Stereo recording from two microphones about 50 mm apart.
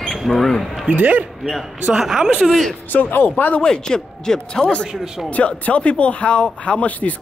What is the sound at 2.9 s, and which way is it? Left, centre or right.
Speech, left.